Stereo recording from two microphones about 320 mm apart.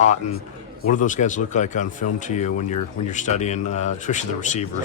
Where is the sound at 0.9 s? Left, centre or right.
Left.